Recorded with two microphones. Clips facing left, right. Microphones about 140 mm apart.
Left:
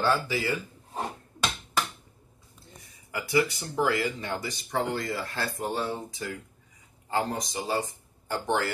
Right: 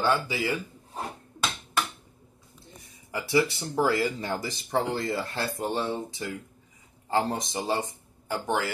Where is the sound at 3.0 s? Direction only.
25° right (ahead or behind).